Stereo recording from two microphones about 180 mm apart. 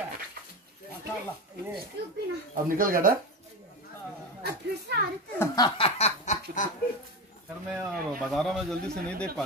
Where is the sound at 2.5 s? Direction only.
50° right (ahead or behind).